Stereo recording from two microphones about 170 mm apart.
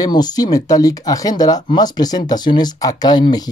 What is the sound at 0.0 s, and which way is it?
Speech, 25° left (ahead or behind).